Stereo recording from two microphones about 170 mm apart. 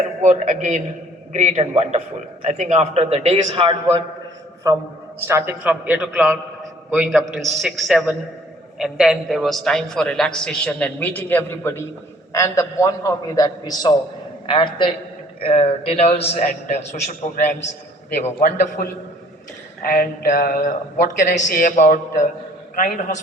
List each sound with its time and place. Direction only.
0.2 s a man's voice: 45° right (ahead or behind)
4.7 s a man's voice: 20° right (ahead or behind); by 17.7 s 50° left (ahead or behind)
18.3 s a sound: 55° left (ahead or behind)
21.3 s a man's voice: 50° left (ahead or behind)